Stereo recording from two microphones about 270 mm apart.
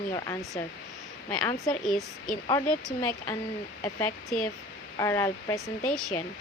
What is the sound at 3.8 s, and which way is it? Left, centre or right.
Speech, centre.